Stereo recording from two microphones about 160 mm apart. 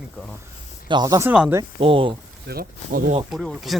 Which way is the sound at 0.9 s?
25° right (ahead or behind).